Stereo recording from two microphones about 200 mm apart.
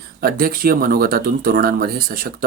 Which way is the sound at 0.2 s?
45° right (ahead or behind).